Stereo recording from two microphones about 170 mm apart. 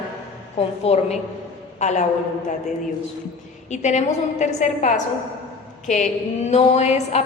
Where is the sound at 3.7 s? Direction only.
45° left (ahead or behind).